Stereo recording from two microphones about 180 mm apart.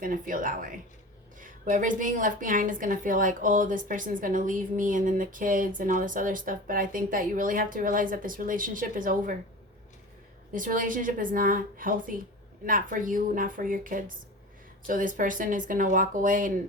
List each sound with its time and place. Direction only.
0.0 s a woman's voice: 50° right (ahead or behind)
10.5 s a woman's voice: 50° right (ahead or behind)